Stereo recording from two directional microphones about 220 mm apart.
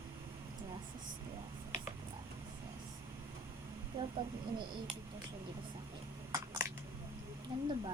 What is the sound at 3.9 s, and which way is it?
Speech, 25° right (ahead or behind).